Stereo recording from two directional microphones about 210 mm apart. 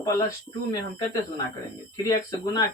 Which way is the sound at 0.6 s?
20° left (ahead or behind).